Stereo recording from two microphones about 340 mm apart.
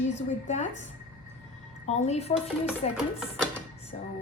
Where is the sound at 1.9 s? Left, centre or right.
Centre.